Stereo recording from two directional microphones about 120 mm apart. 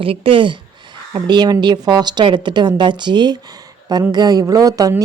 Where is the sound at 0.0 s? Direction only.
50° right (ahead or behind).